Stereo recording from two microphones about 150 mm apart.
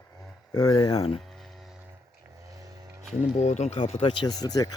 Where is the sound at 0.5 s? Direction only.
25° left (ahead or behind).